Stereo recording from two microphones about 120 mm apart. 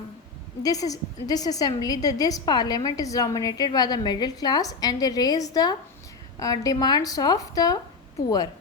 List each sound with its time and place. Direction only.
0.6 s a woman's voice: 30° left (ahead or behind)